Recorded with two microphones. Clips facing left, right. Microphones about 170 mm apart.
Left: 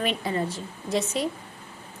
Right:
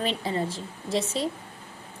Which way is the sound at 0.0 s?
30° right (ahead or behind).